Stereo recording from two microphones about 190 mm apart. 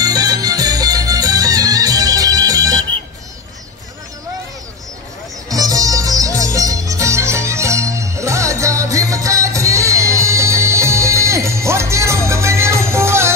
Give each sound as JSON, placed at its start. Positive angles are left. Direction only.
{"t": 0.0, "sound": "music", "side_deg": -20}
{"t": 5.5, "sound": "music", "side_deg": -20}